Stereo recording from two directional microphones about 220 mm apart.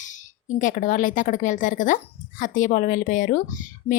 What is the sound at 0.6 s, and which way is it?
A woman's voice, 35° left (ahead or behind).